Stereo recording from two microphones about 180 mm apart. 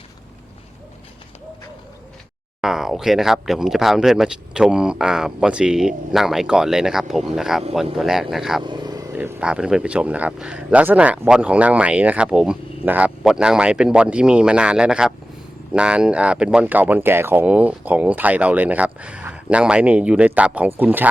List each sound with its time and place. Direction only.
2.6 s speech: centre (ahead or behind)
8.6 s vehicle: 25° right (ahead or behind)
9.1 s speech: 5° right (ahead or behind)